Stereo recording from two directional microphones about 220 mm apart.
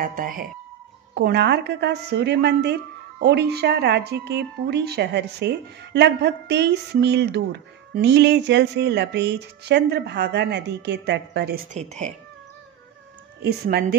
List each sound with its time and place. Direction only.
0.0 s a woman's voice: 40° right (ahead or behind)
11.7 s speech: 30° right (ahead or behind)
13.5 s a woman's voice: 45° right (ahead or behind)